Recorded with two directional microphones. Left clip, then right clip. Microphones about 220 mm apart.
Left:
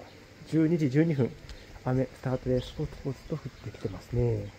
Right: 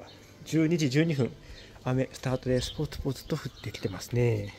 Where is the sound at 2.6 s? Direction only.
25° right (ahead or behind).